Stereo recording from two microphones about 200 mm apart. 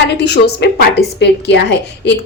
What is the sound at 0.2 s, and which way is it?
A woman's voice, 55° left (ahead or behind).